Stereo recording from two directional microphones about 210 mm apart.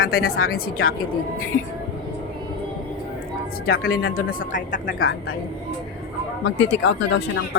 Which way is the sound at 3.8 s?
45° left (ahead or behind).